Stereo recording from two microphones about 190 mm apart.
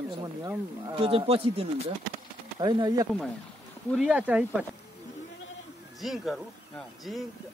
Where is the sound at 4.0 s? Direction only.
5° right (ahead or behind).